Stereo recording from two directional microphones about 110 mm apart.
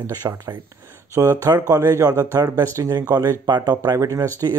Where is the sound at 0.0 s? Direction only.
30° right (ahead or behind).